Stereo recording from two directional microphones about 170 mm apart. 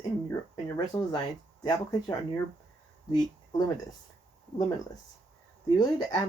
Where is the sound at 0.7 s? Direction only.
25° left (ahead or behind).